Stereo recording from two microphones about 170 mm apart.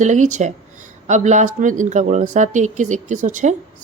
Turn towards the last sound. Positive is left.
turn(degrees=-50)  # may be behind; listen again after turning